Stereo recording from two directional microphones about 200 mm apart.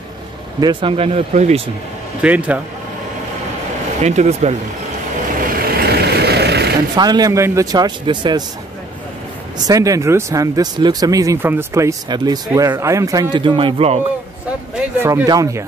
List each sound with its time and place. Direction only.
0.6 s a man's voice: 25° right (ahead or behind)
2.2 s speech: 5° right (ahead or behind)
4.0 s speech: 35° right (ahead or behind)
5.5 s vehicle: 50° right (ahead or behind)
7.0 s a man's voice: 20° right (ahead or behind)
9.7 s speech: 15° right (ahead or behind)
15.0 s speech: 15° right (ahead or behind)